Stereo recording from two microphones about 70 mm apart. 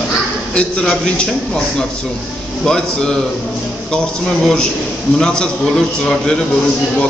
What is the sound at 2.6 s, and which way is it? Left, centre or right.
A man's voice, centre.